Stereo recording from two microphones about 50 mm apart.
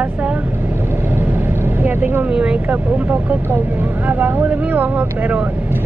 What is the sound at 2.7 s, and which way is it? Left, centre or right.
Speech, right.